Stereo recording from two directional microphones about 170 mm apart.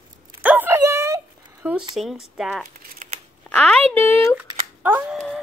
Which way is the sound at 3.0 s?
50° right (ahead or behind).